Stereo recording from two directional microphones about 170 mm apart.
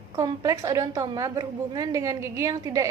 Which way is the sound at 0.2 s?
20° right (ahead or behind).